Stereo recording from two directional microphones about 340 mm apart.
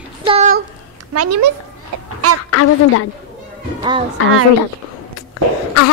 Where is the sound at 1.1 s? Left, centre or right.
Right.